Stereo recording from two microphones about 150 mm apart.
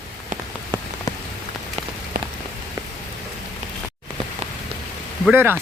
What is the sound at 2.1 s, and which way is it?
Rain on surface, 90° right.